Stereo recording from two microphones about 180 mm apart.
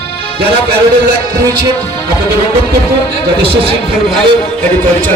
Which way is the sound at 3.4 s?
30° right (ahead or behind).